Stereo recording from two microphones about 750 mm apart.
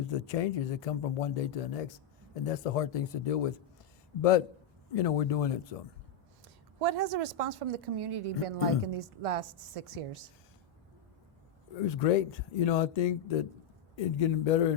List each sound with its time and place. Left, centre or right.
0.1 s speech: left
6.7 s a woman's voice: right
11.9 s speech: left